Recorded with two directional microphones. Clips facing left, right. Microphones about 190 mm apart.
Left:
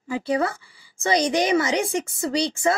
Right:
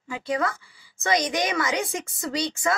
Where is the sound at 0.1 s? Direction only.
30° left (ahead or behind).